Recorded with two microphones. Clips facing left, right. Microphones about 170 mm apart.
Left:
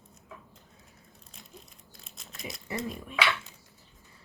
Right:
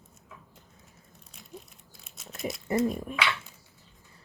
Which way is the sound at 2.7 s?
45° right (ahead or behind).